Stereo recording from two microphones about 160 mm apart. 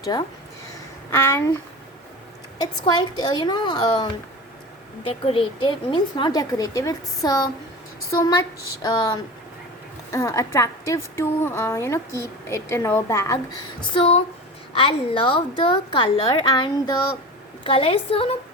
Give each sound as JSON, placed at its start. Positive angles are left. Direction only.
{"t": 0.0, "sound": "a woman's voice", "side_deg": 25}
{"t": 2.6, "sound": "a woman's voice", "side_deg": 25}
{"t": 13.9, "sound": "a woman's voice", "side_deg": 35}
{"t": 17.6, "sound": "a woman's voice", "side_deg": 35}